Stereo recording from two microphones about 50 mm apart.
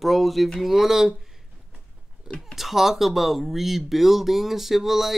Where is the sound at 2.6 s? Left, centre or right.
Centre.